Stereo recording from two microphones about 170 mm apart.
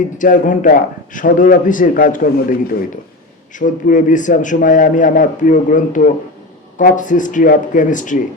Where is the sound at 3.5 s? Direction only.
50° left (ahead or behind).